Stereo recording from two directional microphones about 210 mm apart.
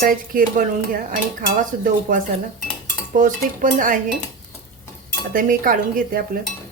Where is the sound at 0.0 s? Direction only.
40° right (ahead or behind).